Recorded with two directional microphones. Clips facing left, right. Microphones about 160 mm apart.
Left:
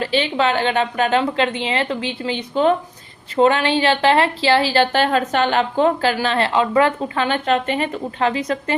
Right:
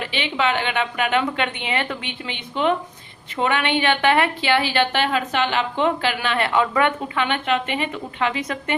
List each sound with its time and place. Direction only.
0.0 s a woman's voice: 35° left (ahead or behind)